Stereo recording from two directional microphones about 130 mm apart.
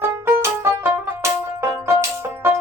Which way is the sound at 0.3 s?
20° right (ahead or behind).